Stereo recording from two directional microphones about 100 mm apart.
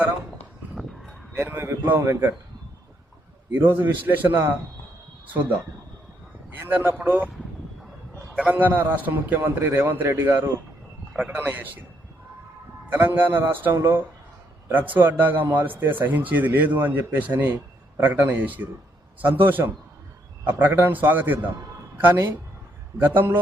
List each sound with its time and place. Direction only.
1.4 s speech: 20° right (ahead or behind)
3.5 s speech: 20° right (ahead or behind)
6.5 s a man's voice: 20° right (ahead or behind)
8.4 s a man's voice: 20° right (ahead or behind)
12.9 s speech: 20° right (ahead or behind)
17.5 s a sound: 30° right (ahead or behind)
18.1 s a man's voice: 20° right (ahead or behind)